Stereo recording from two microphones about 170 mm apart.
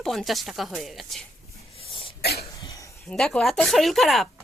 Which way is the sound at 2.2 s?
70° left (ahead or behind).